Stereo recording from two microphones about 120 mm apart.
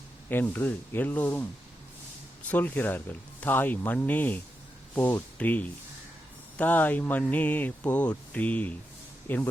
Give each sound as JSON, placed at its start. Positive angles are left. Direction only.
{"t": 0.3, "sound": "speech", "side_deg": 15}
{"t": 2.5, "sound": "speech", "side_deg": 15}